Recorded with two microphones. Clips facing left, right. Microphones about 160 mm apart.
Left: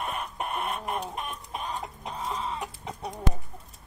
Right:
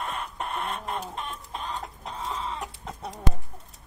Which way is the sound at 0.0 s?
20° left (ahead or behind).